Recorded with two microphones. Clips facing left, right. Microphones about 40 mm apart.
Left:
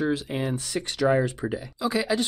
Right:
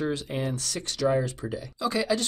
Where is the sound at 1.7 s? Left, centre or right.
Centre.